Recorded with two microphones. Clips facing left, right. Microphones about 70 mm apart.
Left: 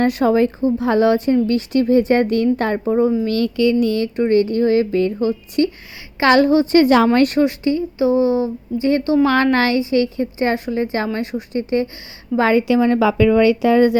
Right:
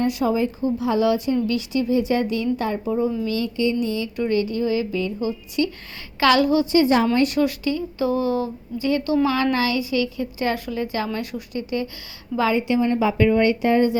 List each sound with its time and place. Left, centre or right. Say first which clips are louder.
0.0 s speech: left 6 dB; left
0.6 s speech: left 5 dB; left
4.2 s speech: left 6 dB; left
6.1 s a woman's voice: left 4 dB; left
6.9 s speech: left 5 dB; left
7.3 s speech: left 5 dB; left
8.9 s a woman's voice: left 4 dB; left
9.2 s a woman's voice: left 5 dB; left
12.5 s speech: left 5 dB; left